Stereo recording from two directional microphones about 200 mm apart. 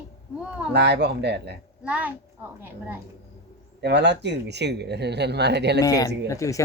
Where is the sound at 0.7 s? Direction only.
55° right (ahead or behind).